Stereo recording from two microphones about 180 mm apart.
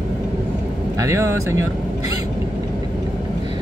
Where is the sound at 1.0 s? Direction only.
15° right (ahead or behind).